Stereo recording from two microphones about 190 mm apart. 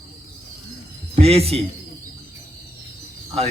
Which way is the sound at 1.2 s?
30° right (ahead or behind).